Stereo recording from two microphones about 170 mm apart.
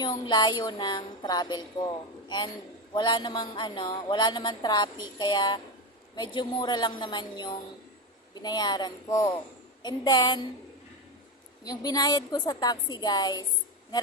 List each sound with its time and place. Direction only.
0.0 s speech: 25° left (ahead or behind)
2.9 s speech: 25° left (ahead or behind)
11.6 s speech: 20° left (ahead or behind)